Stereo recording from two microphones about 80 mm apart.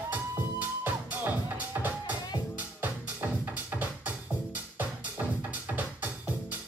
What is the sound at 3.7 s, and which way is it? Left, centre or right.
Music, right.